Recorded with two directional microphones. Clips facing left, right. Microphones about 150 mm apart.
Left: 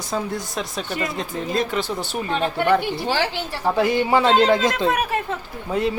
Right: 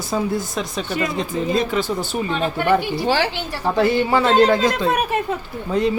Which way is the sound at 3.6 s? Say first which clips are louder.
Right 2 dB; 10° left (ahead or behind).